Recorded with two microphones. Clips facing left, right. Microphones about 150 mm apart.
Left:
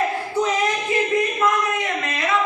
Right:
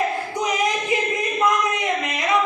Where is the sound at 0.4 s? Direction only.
15° right (ahead or behind).